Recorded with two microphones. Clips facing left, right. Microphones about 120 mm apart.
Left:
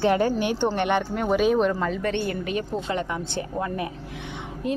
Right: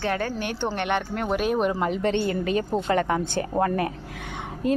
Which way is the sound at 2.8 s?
55° right (ahead or behind).